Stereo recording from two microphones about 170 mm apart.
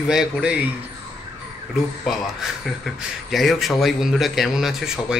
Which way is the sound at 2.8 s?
Centre (ahead or behind).